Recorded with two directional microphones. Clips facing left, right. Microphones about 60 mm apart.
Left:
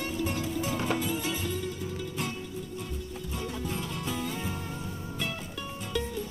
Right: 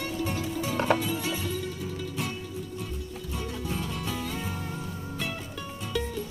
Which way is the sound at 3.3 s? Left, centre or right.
Right.